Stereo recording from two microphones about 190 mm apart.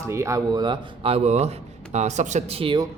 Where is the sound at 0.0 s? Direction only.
15° right (ahead or behind).